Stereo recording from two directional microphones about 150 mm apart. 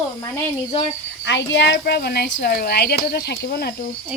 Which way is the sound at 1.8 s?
90° left.